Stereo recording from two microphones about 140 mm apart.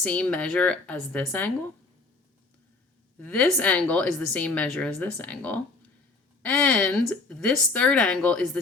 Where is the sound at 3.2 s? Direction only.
10° left (ahead or behind).